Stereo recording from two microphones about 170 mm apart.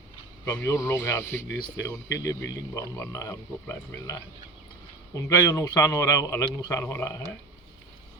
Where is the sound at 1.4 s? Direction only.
90° left.